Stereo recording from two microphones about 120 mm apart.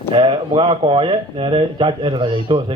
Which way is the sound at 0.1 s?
40° right (ahead or behind).